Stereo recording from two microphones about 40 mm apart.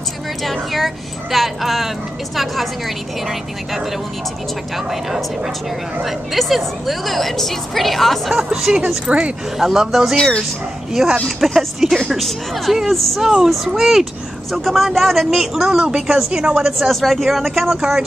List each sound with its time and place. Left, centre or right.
0.4 s a woman's voice: centre
6.0 s a woman's voice: centre
8.5 s speech: centre
9.0 s a woman's voice: right
9.6 s a woman's voice: centre
16.3 s a woman's voice: right
16.7 s a woman's voice: centre